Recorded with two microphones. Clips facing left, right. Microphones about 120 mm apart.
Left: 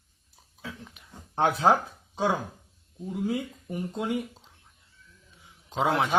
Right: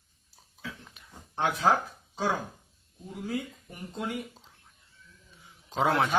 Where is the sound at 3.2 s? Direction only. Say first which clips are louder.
Left 3 dB; 20° left (ahead or behind).